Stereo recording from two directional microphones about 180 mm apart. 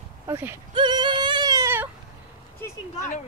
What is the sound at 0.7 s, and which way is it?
Singing, 25° right (ahead or behind).